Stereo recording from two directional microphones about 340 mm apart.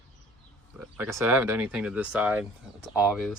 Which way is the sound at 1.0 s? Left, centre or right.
Centre.